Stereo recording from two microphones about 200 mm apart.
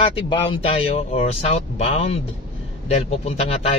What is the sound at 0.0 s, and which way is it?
A man's voice, 25° left (ahead or behind).